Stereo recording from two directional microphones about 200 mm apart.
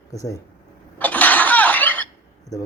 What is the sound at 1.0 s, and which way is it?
Cough, 10° left (ahead or behind).